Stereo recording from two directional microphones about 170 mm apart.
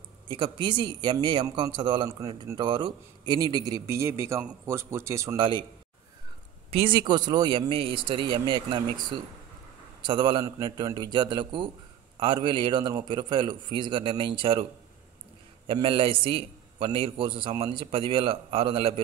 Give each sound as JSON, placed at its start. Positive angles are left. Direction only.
{"t": 0.3, "sound": "a man's voice", "side_deg": -30}
{"t": 5.4, "sound": "a man's voice", "side_deg": -30}
{"t": 6.7, "sound": "a man's voice", "side_deg": -30}
{"t": 10.0, "sound": "a man's voice", "side_deg": -25}